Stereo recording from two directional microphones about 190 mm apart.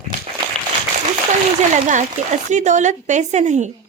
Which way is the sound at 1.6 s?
40° right (ahead or behind).